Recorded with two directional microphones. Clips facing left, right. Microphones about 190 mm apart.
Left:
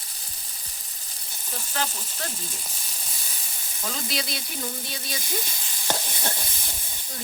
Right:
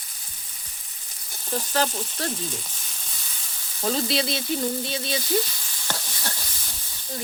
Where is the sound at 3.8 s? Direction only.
30° right (ahead or behind).